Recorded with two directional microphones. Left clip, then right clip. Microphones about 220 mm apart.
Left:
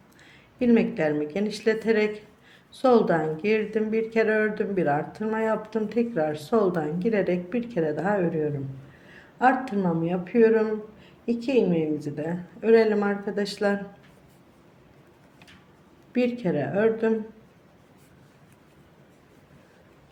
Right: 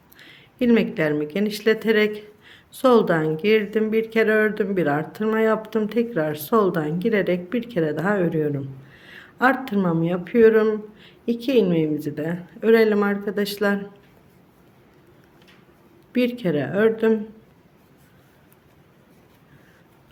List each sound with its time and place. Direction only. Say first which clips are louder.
0.2 s speech: right 3 dB; 25° right (ahead or behind)
16.1 s speech: right 3 dB; 25° right (ahead or behind)